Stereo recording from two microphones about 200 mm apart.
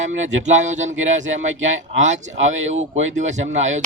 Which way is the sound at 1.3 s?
75° right (ahead or behind).